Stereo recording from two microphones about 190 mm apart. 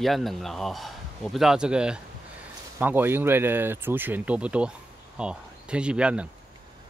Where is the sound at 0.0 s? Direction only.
Centre (ahead or behind).